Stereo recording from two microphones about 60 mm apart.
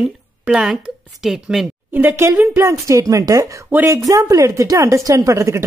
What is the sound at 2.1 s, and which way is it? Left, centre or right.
Speech, right.